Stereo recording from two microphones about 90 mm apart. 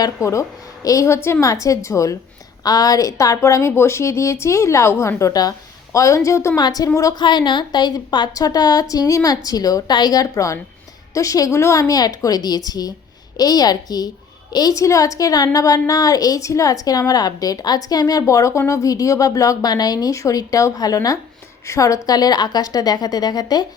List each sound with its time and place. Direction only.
0.0 s a woman's voice: 35° left (ahead or behind)
6.6 s a woman's voice: 45° left (ahead or behind)
7.2 s a woman's voice: 55° left (ahead or behind)